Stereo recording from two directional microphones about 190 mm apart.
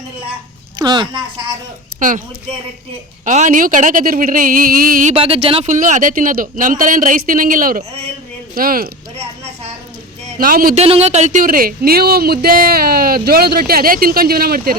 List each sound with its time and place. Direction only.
0.8 s speech: 20° right (ahead or behind)
2.0 s speech: 45° right (ahead or behind)
3.2 s speech: 40° right (ahead or behind)
5.1 s speech: 30° right (ahead or behind)
5.7 s speech: 45° right (ahead or behind)
10.4 s speech: 50° right (ahead or behind)
10.8 s speech: 35° right (ahead or behind); by 14.8 s 50° right (ahead or behind)